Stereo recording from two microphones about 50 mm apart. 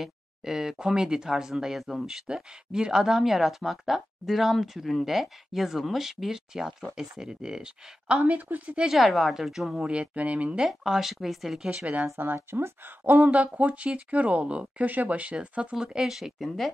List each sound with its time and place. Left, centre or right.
0.0 s speech: centre
8.2 s a woman's voice: right
8.9 s speech: centre
9.8 s speech: right
10.7 s speech: centre
12.4 s speech: right
13.3 s speech: right
15.8 s speech: centre